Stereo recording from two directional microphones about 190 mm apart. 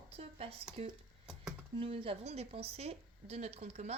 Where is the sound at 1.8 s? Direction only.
30° right (ahead or behind).